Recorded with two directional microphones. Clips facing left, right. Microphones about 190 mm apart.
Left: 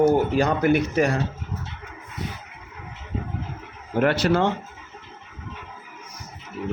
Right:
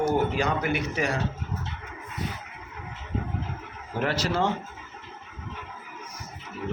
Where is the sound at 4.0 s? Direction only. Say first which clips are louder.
Left 7 dB; 60° left (ahead or behind).